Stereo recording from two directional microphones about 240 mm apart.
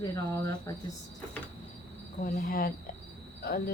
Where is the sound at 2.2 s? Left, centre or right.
Left.